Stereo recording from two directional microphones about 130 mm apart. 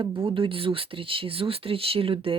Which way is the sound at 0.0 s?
40° right (ahead or behind).